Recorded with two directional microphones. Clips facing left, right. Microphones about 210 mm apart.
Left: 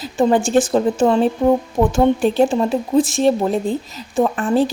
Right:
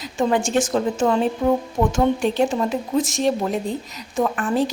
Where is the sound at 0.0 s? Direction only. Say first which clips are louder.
Left 5 dB; 35° left (ahead or behind).